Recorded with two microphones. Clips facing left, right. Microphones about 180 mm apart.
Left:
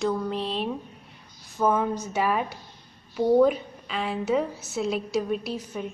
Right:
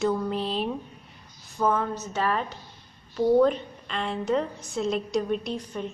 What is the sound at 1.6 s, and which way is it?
A woman's voice, 10° left (ahead or behind).